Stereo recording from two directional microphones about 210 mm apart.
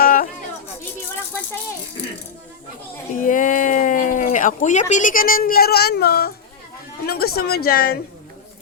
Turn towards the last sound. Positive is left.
turn(degrees=45)  # may be behind; listen again after turning